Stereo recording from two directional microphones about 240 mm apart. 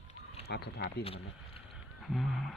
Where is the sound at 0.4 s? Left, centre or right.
Left.